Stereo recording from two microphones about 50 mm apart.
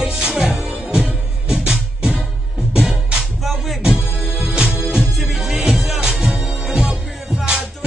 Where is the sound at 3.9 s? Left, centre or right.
Right.